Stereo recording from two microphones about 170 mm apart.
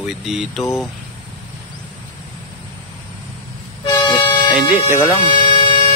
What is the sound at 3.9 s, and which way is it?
Toot, 30° left (ahead or behind).